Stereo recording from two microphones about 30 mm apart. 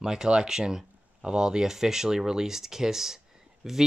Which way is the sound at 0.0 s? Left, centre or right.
Right.